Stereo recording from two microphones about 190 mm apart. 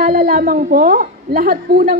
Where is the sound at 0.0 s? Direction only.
50° right (ahead or behind).